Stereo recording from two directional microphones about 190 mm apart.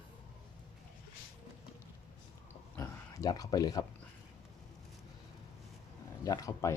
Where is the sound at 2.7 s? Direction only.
15° left (ahead or behind).